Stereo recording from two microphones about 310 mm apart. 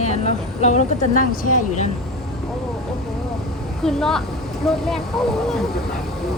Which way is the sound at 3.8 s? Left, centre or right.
Centre.